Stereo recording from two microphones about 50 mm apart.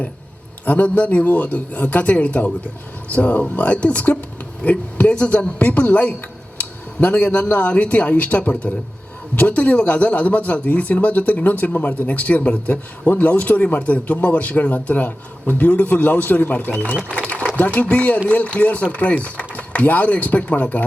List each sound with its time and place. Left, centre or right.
0.6 s a man's voice: left